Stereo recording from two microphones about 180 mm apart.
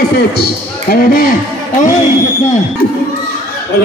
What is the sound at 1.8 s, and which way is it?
Speech, 40° left (ahead or behind).